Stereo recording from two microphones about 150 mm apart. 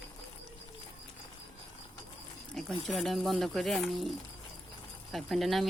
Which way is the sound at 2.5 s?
Centre (ahead or behind).